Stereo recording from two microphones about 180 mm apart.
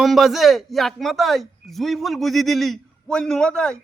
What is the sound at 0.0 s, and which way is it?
Speech, centre (ahead or behind).